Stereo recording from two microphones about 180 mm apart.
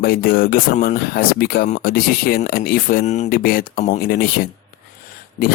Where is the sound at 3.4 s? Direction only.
55° left (ahead or behind).